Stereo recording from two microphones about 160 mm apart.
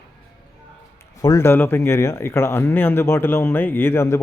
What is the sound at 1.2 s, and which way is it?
Speech, 20° left (ahead or behind).